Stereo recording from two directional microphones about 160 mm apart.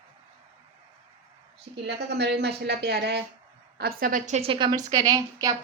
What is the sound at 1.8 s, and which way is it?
A woman's voice, 90° right.